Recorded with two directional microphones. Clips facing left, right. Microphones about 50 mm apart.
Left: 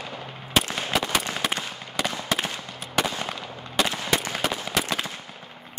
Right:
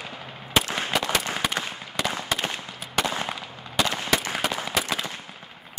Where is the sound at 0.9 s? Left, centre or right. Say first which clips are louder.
Left 1 dB; centre.